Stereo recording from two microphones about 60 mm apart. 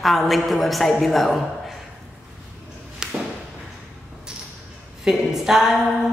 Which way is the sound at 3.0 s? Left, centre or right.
Centre.